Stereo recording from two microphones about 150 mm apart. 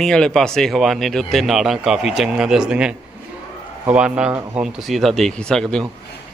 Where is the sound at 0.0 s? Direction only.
5° left (ahead or behind).